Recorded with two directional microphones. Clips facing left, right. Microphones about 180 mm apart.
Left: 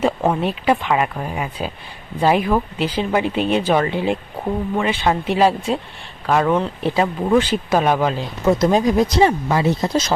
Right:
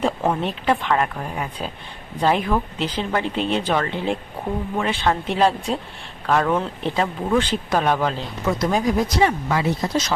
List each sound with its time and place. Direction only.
0.2 s speech: 10° left (ahead or behind)
8.4 s speech: 25° left (ahead or behind)